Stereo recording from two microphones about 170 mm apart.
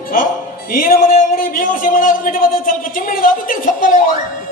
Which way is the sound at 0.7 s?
55° left (ahead or behind).